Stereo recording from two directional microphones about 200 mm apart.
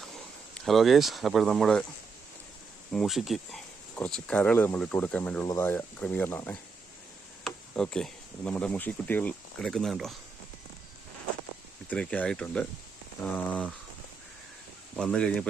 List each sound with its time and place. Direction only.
0.6 s speech: centre (ahead or behind)
2.9 s speech: centre (ahead or behind)
11.9 s speech: 5° left (ahead or behind)
14.9 s speech: 5° left (ahead or behind)